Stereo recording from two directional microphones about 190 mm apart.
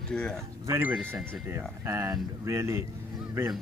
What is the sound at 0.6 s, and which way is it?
Speech, 15° right (ahead or behind).